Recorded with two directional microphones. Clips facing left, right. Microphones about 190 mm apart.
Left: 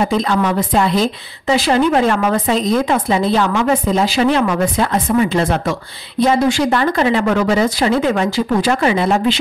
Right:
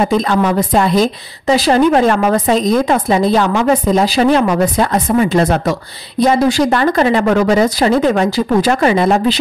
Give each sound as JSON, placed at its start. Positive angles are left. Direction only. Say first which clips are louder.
{"t": 0.3, "sound": "a woman's voice", "louder": "right 3 dB", "side_deg": -45}